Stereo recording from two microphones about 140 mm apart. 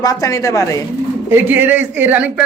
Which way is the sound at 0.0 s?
25° left (ahead or behind).